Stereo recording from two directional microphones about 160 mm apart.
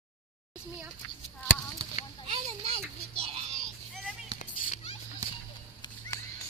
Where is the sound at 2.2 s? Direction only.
40° right (ahead or behind).